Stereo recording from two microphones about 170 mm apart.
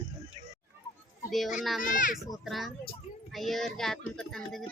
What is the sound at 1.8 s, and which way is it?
Speech, 50° left (ahead or behind).